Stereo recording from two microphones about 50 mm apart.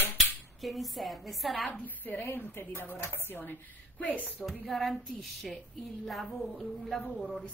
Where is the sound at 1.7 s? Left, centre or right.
Left.